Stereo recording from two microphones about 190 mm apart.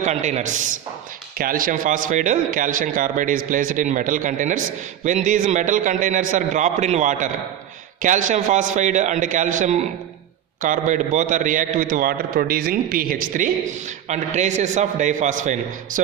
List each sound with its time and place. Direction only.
0.0 s a man's voice: 40° right (ahead or behind)